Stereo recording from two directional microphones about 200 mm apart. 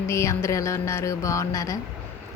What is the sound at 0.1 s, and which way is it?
A woman's voice, 15° left (ahead or behind).